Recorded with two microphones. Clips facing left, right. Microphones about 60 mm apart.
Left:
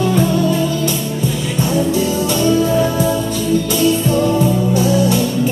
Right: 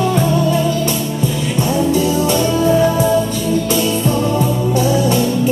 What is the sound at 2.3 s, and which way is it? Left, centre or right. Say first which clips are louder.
Music: left 1 dB; right.